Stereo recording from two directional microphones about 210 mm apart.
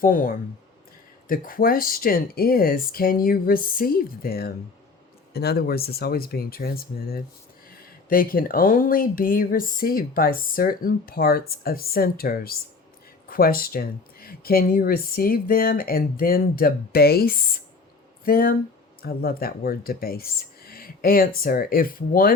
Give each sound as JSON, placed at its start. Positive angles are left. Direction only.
{"t": 0.0, "sound": "speech", "side_deg": 40}